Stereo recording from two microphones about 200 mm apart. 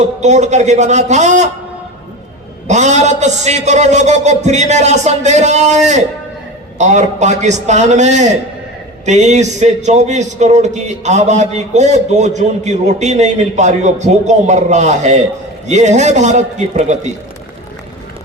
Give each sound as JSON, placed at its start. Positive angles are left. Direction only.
{"t": 0.0, "sound": "a man's voice", "side_deg": -35}
{"t": 2.6, "sound": "a man's voice", "side_deg": -35}